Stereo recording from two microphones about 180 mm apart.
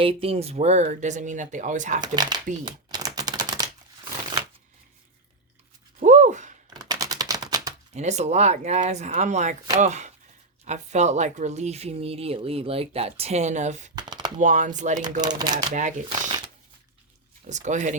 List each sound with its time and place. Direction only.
0.0 s speech: 30° right (ahead or behind)
2.0 s speech: 25° right (ahead or behind)
2.6 s typewriter: 20° right (ahead or behind)
6.0 s a sound: 40° right (ahead or behind)
6.8 s typewriter: 20° right (ahead or behind)
7.9 s speech: 40° right (ahead or behind)
13.9 s a sound: 25° right (ahead or behind)
14.3 s speech: 40° right (ahead or behind)
15.2 s speech: 25° right (ahead or behind)
15.5 s speech: 45° right (ahead or behind)
17.4 s speech: 40° right (ahead or behind)